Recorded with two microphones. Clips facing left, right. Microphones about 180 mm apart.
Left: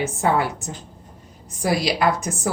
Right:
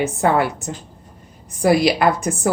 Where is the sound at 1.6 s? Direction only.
55° right (ahead or behind).